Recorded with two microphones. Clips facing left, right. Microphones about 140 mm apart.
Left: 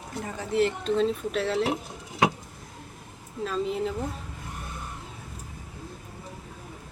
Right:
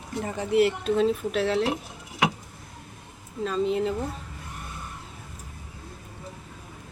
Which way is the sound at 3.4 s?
Centre (ahead or behind).